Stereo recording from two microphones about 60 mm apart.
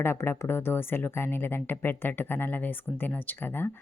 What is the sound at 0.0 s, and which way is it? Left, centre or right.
Speech, left.